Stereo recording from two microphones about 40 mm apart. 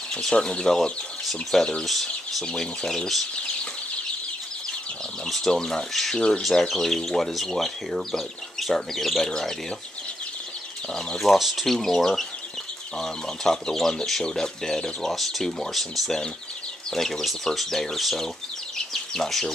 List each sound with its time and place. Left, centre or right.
0.2 s speech: centre
2.4 s speech: centre
5.2 s a sound: centre
5.6 s speech: centre
6.7 s speech: centre
11.1 s speech: centre
11.6 s speech: centre